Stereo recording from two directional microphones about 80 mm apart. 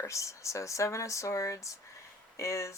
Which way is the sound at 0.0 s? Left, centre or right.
Left.